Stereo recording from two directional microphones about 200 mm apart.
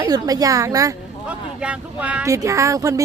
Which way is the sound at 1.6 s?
5° right (ahead or behind).